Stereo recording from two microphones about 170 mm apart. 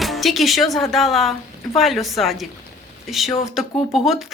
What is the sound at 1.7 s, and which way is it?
Speech, centre (ahead or behind).